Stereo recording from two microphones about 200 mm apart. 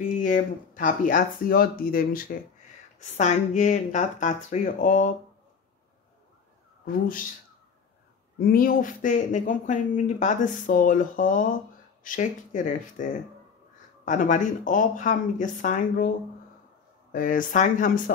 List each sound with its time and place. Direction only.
0.2 s speech: 40° left (ahead or behind)
6.9 s speech: 45° left (ahead or behind)
8.4 s speech: 45° left (ahead or behind)
17.1 s speech: 45° left (ahead or behind)